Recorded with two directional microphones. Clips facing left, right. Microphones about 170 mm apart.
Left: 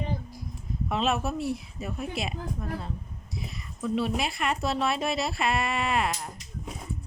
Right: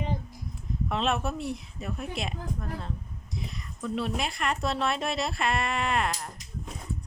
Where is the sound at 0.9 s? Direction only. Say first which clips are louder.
Left 1 dB; 5° left (ahead or behind).